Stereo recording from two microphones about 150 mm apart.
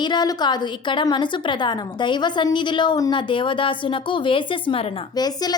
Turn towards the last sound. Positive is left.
turn(degrees=25)  # may be behind; listen again after turning